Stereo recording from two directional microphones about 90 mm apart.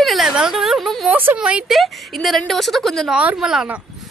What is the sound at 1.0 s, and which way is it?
Speech, 15° right (ahead or behind).